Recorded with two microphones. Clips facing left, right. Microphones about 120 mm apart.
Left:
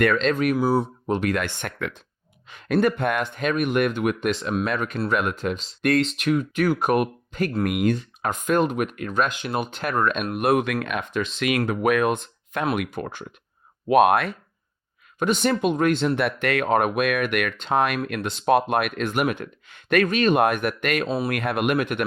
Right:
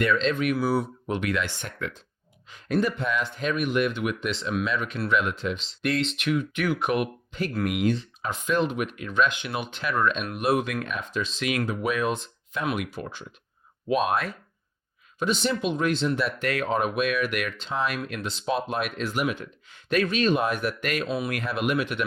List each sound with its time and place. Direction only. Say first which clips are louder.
0.0 s speech: left 3 dB; 55° left (ahead or behind); by 1.4 s 40° left (ahead or behind)
1.4 s speech: left 3 dB; 55° left (ahead or behind)
13.8 s speech: left 7 dB; 65° left (ahead or behind)
15.2 s speech: left 4 dB; 55° left (ahead or behind)